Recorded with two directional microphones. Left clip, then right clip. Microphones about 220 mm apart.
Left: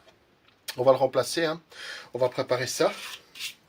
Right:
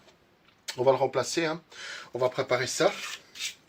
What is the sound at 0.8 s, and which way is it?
Speech, 30° left (ahead or behind).